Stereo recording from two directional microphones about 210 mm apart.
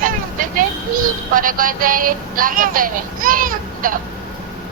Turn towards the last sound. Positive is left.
turn(degrees=-40)  # may be behind; listen again after turning